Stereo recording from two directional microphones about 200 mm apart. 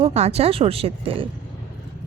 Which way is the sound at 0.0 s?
30° right (ahead or behind).